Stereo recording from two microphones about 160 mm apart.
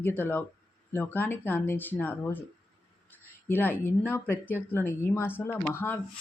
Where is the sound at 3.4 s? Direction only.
10° left (ahead or behind).